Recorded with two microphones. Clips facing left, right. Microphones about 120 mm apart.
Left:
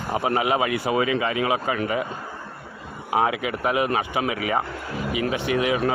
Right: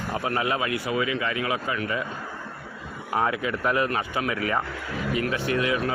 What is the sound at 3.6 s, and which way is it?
Speech, 15° left (ahead or behind).